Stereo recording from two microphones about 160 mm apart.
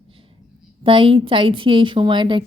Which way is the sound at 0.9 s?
35° right (ahead or behind).